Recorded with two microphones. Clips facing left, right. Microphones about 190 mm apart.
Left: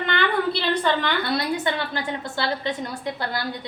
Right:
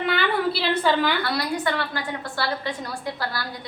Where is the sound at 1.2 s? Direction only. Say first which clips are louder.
Left 1 dB; 20° left (ahead or behind).